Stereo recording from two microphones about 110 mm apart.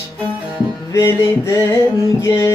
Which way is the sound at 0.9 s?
25° left (ahead or behind).